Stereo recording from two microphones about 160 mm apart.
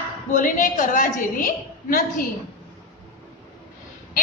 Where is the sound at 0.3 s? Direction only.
55° left (ahead or behind).